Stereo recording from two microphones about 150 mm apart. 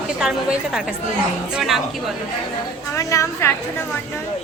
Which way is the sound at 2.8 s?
20° left (ahead or behind).